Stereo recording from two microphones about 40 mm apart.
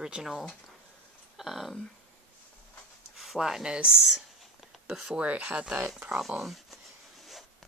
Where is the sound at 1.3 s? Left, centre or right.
Centre.